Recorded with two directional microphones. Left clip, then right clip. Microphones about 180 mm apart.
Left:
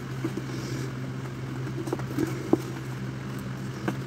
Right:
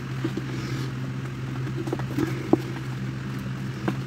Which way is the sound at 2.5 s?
Centre (ahead or behind).